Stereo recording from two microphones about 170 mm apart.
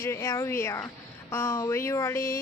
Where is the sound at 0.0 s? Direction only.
15° left (ahead or behind).